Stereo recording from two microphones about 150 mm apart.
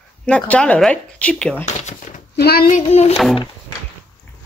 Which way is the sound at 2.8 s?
45° left (ahead or behind).